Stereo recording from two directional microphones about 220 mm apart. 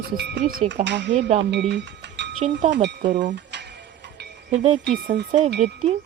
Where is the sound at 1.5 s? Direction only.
50° right (ahead or behind).